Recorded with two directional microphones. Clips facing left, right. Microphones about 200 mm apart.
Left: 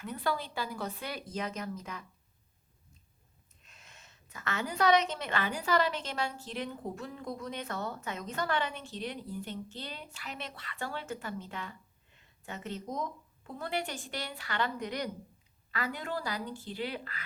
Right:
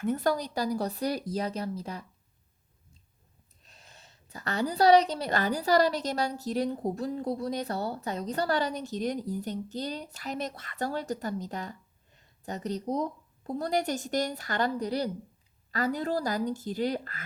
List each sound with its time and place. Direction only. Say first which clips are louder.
0.0 s a woman's voice: right 7 dB; 45° right (ahead or behind)
3.6 s a woman's voice: right 3 dB; 35° right (ahead or behind)